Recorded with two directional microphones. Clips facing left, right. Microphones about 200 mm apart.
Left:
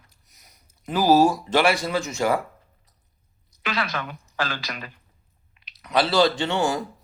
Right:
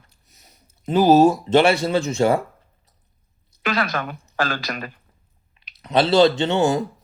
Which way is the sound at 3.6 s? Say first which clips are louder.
Right 5 dB; 45° right (ahead or behind).